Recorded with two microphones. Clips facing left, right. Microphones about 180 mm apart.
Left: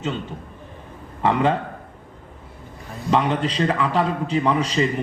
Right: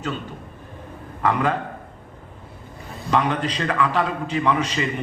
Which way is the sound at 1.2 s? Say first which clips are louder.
Left 2 dB; 25° left (ahead or behind).